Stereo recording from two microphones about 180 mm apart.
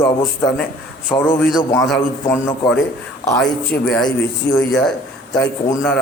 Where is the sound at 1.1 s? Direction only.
10° left (ahead or behind).